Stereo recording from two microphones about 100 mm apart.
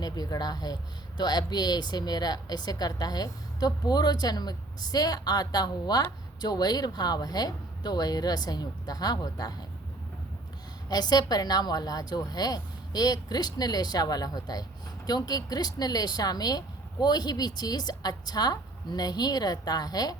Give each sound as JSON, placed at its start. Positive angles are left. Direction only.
{"t": 0.0, "sound": "speech", "side_deg": 40}
{"t": 10.8, "sound": "speech", "side_deg": 40}